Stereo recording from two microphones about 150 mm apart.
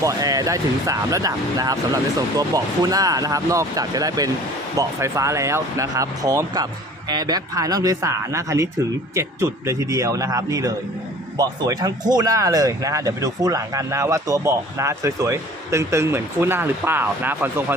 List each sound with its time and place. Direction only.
0.0 s speech: 25° right (ahead or behind)